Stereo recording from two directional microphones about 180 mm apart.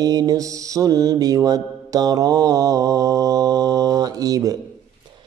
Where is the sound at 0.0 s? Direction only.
20° right (ahead or behind).